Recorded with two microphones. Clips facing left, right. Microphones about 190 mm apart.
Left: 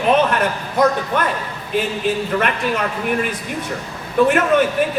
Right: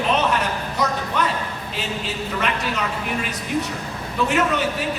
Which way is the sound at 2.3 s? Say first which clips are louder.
Left 5 dB; 55° left (ahead or behind).